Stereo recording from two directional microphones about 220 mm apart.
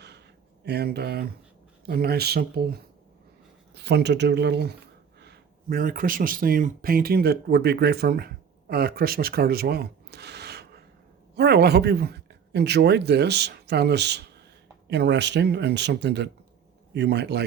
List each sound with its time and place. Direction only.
0.6 s speech: 50° right (ahead or behind)
3.8 s speech: 50° right (ahead or behind)